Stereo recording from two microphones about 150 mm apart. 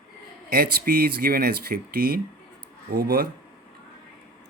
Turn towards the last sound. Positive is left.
turn(degrees=-80)